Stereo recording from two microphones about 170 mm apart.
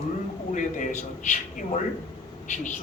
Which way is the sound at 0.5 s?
45° left (ahead or behind).